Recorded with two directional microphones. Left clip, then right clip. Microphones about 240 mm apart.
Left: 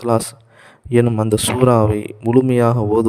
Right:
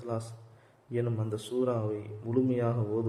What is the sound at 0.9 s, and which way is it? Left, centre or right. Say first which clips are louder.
A man's voice: left 18 dB; left.